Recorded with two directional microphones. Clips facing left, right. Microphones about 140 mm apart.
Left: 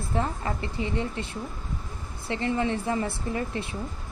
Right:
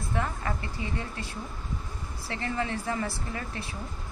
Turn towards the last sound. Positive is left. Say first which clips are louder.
# left 6 dB
turn(degrees=25)  # may be behind; listen again after turning